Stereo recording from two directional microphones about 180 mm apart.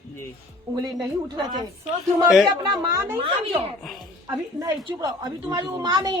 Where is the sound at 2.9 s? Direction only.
15° right (ahead or behind).